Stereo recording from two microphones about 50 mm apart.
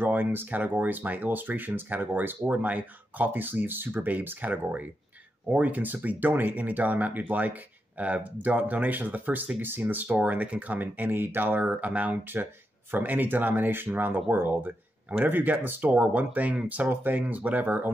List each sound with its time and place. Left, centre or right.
0.0 s speech: right
10.0 s speech: right
11.1 s speech: right
15.9 s speech: right